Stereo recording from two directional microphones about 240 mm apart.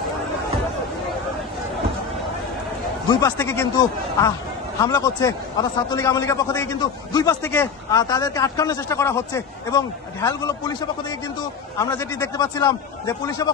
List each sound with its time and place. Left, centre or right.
3.1 s a man's voice: centre
11.8 s a man's voice: centre